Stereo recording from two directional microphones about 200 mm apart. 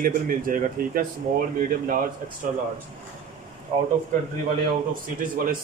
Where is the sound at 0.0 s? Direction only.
45° right (ahead or behind).